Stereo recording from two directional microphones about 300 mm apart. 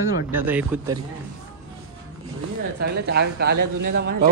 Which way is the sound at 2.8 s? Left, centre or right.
Right.